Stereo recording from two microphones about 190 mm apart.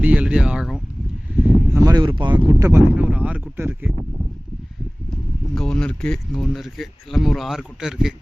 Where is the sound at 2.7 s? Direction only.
10° right (ahead or behind).